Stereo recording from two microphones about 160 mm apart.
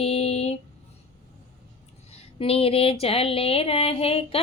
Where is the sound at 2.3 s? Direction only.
35° left (ahead or behind).